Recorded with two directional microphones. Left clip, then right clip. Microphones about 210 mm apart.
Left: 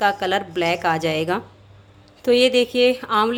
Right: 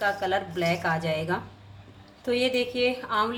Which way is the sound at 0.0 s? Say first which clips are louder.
Left 6 dB; 50° left (ahead or behind).